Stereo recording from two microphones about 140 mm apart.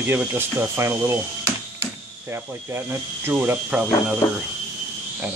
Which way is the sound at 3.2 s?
15° right (ahead or behind).